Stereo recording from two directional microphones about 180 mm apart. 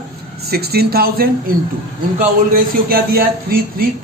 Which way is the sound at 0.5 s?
60° right (ahead or behind).